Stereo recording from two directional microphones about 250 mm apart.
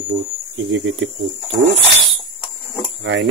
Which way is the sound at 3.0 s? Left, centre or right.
Right.